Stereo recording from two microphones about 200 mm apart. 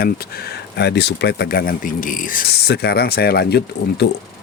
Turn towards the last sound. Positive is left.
turn(degrees=55)  # may be behind; listen again after turning